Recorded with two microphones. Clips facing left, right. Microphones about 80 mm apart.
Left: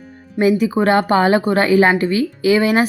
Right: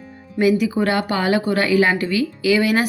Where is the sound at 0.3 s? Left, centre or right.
Left.